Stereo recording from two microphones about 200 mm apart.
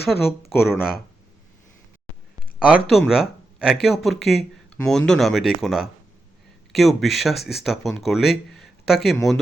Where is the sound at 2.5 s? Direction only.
5° right (ahead or behind).